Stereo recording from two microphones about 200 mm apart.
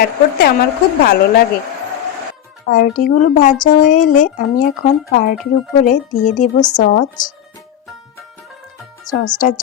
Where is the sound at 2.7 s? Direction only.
45° left (ahead or behind).